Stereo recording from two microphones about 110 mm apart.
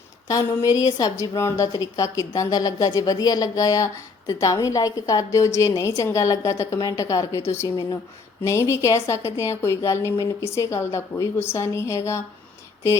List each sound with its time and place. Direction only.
0.3 s a woman's voice: 30° left (ahead or behind)